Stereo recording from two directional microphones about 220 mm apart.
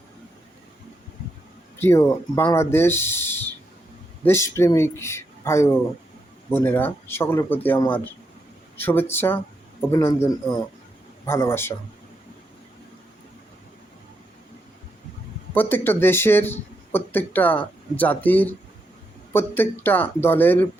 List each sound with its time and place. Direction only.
1.8 s speech: 10° left (ahead or behind)
11.3 s speech: 10° left (ahead or behind)
15.5 s speech: 10° left (ahead or behind)